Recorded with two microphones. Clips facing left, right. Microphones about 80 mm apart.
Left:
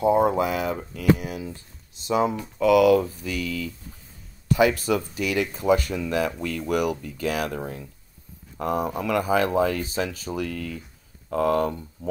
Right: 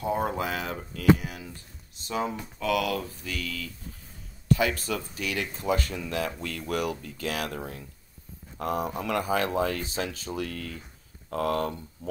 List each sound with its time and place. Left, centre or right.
0.0 s speech: left